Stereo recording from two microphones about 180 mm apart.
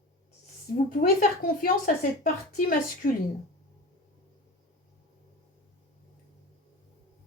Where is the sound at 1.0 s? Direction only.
55° left (ahead or behind).